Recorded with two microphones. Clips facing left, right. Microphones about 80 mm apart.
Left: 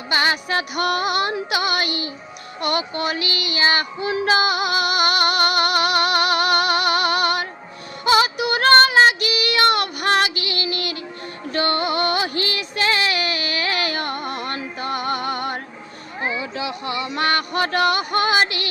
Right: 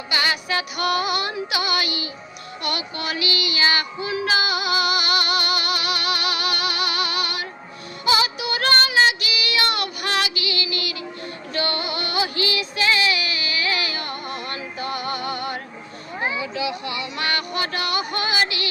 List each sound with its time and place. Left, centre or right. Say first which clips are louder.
0.1 s music: left 3 dB; left
2.6 s child singing: left 6 dB; left
16.4 s a sound: right 1 dB; left